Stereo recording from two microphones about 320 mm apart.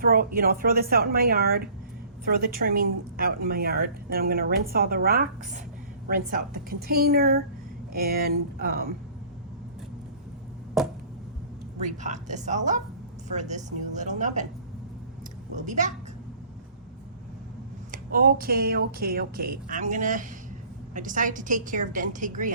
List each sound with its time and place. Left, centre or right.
0.0 s a woman's voice: right
12.0 s a woman's voice: right
15.5 s a woman's voice: right
17.9 s a woman's voice: right